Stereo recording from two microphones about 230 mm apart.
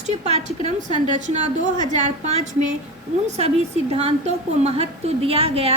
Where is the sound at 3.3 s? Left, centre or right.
Right.